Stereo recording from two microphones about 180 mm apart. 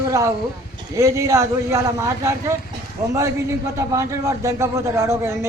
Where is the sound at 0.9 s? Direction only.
15° right (ahead or behind).